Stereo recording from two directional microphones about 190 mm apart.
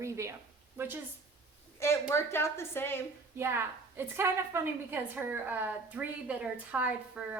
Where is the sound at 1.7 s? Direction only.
15° left (ahead or behind).